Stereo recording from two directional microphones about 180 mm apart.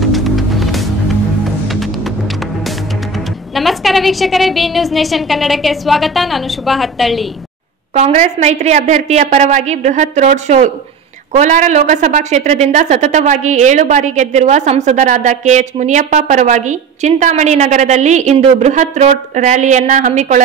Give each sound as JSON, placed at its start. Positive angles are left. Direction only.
{"t": 0.0, "sound": "music", "side_deg": 0}
{"t": 3.5, "sound": "a woman's voice", "side_deg": 0}
{"t": 7.9, "sound": "a woman's voice", "side_deg": -40}